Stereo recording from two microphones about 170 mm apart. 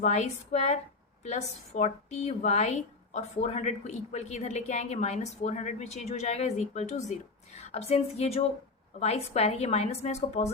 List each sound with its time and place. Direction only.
0.0 s a woman's voice: 45° left (ahead or behind)